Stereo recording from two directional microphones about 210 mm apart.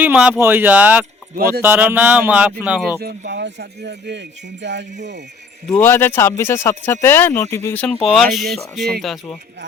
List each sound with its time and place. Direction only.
0.0 s speech: 5° right (ahead or behind)
3.0 s speech: 50° right (ahead or behind)
5.6 s speech: 10° left (ahead or behind)